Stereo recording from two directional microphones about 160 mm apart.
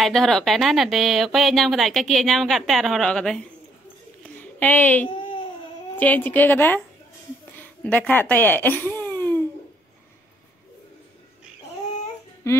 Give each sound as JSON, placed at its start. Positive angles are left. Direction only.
{"t": 0.0, "sound": "a woman's voice", "side_deg": 5}
{"t": 12.4, "sound": "music", "side_deg": 20}